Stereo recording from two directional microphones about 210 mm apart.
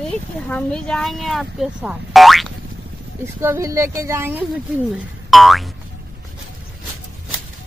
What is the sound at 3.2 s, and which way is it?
Speech, 10° right (ahead or behind).